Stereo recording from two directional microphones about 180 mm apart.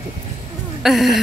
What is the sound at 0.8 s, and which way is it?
Speech, centre (ahead or behind).